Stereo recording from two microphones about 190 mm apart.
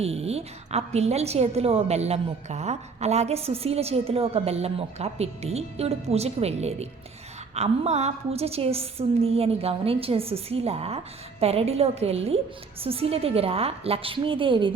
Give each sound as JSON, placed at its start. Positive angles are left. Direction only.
{"t": 0.0, "sound": "a woman's voice", "side_deg": -35}